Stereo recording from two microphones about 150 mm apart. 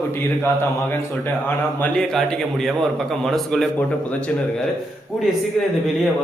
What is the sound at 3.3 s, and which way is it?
Speech, centre (ahead or behind).